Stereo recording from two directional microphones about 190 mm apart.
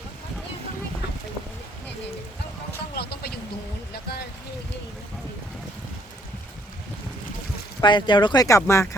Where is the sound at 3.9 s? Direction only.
55° left (ahead or behind).